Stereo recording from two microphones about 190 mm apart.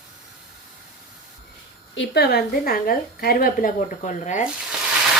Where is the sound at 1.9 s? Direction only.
65° left (ahead or behind); by 4.4 s 40° left (ahead or behind).